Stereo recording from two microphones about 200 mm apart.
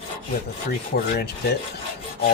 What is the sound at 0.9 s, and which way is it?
Speech, 50° left (ahead or behind).